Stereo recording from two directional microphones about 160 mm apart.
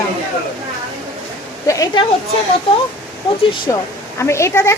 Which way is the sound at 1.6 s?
20° left (ahead or behind).